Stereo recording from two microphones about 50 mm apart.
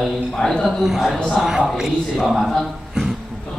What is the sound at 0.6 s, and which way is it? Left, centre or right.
A man's voice, centre.